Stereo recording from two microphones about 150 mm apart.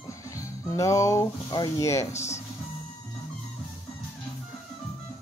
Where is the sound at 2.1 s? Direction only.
50° left (ahead or behind).